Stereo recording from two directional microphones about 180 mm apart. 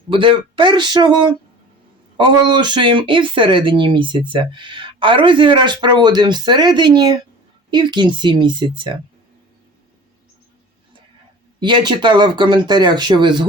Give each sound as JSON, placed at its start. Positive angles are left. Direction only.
{"t": 0.1, "sound": "speech", "side_deg": -30}
{"t": 11.6, "sound": "speech", "side_deg": -25}